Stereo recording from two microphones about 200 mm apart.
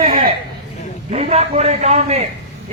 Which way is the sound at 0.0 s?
45° right (ahead or behind).